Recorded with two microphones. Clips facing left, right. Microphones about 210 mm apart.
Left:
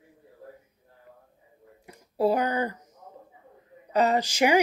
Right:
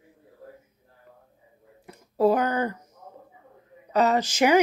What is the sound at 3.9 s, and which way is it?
Speech, 15° left (ahead or behind).